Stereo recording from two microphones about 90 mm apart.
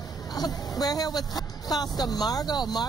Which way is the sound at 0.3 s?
45° left (ahead or behind).